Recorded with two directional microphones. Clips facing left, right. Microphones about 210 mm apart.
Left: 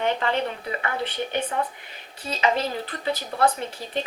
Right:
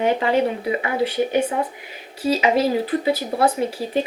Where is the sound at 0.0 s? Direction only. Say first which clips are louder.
Right 6 dB; 10° right (ahead or behind).